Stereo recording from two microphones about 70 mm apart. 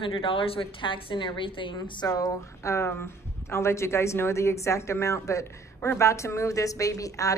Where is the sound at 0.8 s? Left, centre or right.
Left.